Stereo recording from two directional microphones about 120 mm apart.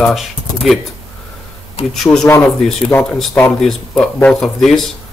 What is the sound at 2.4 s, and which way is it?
Speech, 5° left (ahead or behind).